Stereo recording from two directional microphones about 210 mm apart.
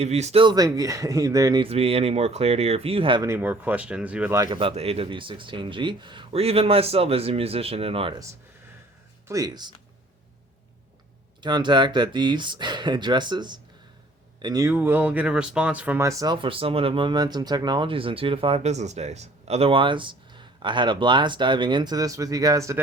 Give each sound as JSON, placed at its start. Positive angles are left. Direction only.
{"t": 0.0, "sound": "speech", "side_deg": -30}
{"t": 3.2, "sound": "speech", "side_deg": -10}
{"t": 4.5, "sound": "speech", "side_deg": -25}
{"t": 9.2, "sound": "speech", "side_deg": -15}
{"t": 11.4, "sound": "speech", "side_deg": -20}